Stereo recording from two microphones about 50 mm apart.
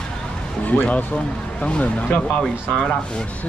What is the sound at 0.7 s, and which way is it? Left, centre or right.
Speech, left.